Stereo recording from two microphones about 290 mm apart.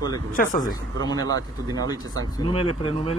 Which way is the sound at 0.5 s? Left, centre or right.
Centre.